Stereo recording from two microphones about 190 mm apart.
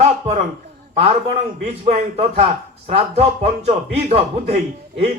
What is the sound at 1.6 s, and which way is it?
Speech, 35° right (ahead or behind).